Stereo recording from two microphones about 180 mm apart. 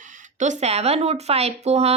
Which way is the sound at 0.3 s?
45° right (ahead or behind).